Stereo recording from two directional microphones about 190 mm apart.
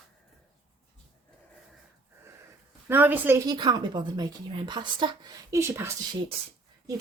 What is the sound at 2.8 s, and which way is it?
A woman's voice, 10° right (ahead or behind).